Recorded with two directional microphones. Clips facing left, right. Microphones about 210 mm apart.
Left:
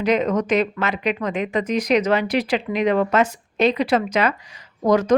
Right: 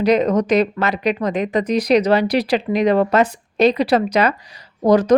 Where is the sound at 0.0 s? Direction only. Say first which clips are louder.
Right 4 dB; 35° right (ahead or behind).